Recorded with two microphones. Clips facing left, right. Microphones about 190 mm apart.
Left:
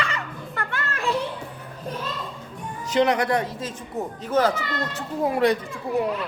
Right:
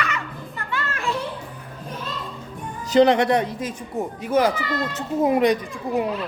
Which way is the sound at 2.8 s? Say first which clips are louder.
Right 5 dB; 35° right (ahead or behind).